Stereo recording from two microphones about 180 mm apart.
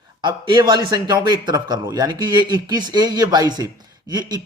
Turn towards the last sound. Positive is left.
turn(degrees=-20)  # may be behind; listen again after turning